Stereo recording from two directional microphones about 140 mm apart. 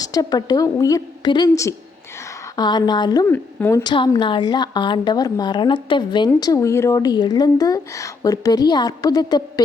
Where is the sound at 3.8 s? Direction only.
30° left (ahead or behind).